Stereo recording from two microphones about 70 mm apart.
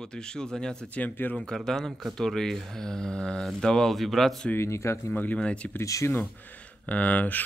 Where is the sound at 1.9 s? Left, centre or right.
Centre.